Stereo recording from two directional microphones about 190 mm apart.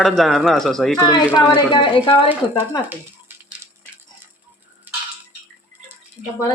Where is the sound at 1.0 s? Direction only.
20° left (ahead or behind).